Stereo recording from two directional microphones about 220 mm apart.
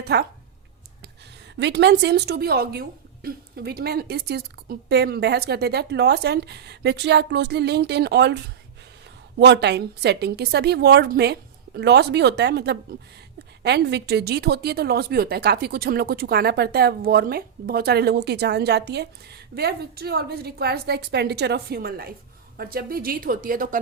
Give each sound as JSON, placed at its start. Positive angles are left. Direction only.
{"t": 0.0, "sound": "speech", "side_deg": -45}
{"t": 1.5, "sound": "a woman's voice", "side_deg": -50}
{"t": 9.4, "sound": "a woman's voice", "side_deg": -50}